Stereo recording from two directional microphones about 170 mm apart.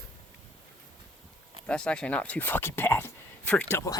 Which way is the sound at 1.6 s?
5° left (ahead or behind).